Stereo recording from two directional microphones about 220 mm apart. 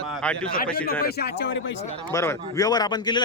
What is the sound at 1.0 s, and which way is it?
Speech, 45° left (ahead or behind).